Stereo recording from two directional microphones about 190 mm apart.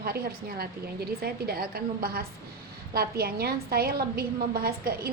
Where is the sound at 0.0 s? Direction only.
55° right (ahead or behind).